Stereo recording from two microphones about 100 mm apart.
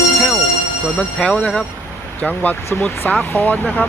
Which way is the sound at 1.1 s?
10° left (ahead or behind).